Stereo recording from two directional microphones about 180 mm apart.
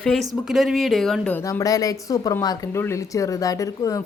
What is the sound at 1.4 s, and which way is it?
Speech, 20° left (ahead or behind).